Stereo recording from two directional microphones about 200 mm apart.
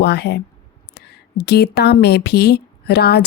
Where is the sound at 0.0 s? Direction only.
55° left (ahead or behind).